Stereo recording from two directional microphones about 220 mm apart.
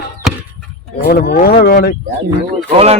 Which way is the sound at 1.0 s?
45° left (ahead or behind).